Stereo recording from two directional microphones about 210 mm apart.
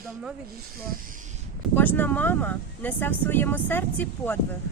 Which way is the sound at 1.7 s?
10° left (ahead or behind).